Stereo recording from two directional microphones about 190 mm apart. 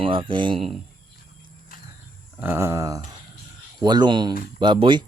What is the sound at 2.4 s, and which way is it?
Speech, 15° right (ahead or behind).